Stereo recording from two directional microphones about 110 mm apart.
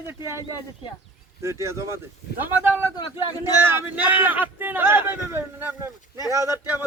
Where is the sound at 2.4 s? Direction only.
15° right (ahead or behind).